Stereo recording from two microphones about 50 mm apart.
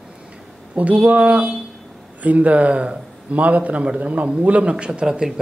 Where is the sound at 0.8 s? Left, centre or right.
Right.